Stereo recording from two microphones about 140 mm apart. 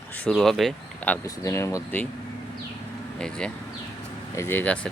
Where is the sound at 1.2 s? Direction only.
20° left (ahead or behind).